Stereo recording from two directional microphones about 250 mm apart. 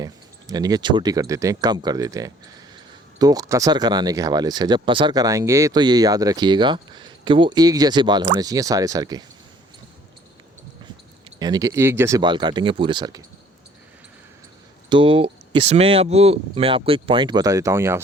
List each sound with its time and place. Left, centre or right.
0.0 s speech: centre
11.3 s speech: centre
14.8 s speech: right